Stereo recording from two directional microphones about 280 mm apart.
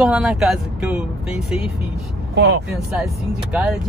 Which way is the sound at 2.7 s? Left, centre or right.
Centre.